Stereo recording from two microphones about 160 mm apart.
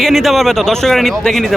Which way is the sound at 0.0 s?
Centre (ahead or behind).